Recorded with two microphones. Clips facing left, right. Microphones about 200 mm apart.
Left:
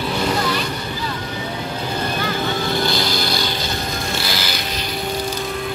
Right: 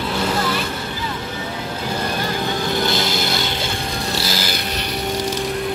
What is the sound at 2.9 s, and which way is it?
Music, 20° right (ahead or behind).